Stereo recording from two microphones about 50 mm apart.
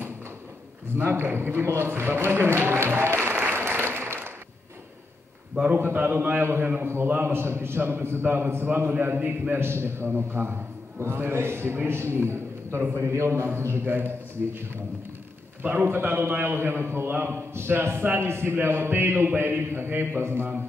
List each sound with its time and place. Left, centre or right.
0.9 s a man's voice: right
5.6 s a man's voice: right
5.9 s a man's voice: right
9.0 s a man's voice: right
9.6 s a man's voice: right